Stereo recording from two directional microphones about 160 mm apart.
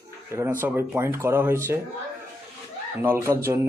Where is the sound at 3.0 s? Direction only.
15° right (ahead or behind).